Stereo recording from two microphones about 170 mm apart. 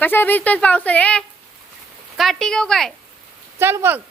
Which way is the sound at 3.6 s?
15° right (ahead or behind).